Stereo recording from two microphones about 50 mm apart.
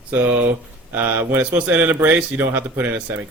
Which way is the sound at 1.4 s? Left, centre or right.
Right.